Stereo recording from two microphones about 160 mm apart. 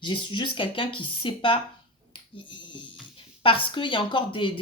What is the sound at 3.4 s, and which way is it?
Speech, 35° left (ahead or behind).